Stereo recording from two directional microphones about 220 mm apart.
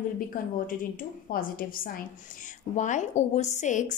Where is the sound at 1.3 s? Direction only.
40° left (ahead or behind).